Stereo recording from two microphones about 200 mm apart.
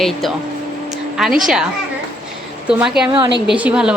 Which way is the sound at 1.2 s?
Centre (ahead or behind).